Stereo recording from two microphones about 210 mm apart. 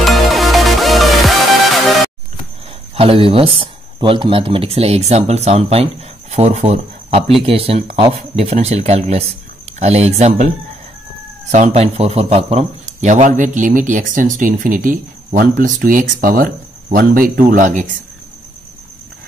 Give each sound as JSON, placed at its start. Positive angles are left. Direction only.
{"t": 0.0, "sound": "music", "side_deg": 0}
{"t": 3.0, "sound": "speech", "side_deg": -25}
{"t": 11.5, "sound": "speech", "side_deg": -30}